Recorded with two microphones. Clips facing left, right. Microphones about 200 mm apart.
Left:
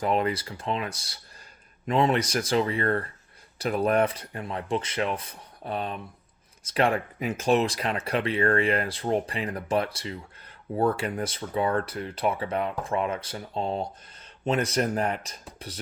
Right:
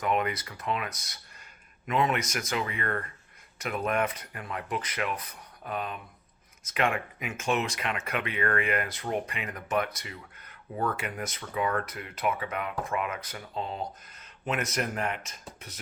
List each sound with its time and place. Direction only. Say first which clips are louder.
0.0 s speech: left 3 dB; 30° left (ahead or behind)